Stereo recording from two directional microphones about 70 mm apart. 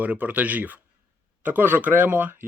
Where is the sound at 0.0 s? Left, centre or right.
Right.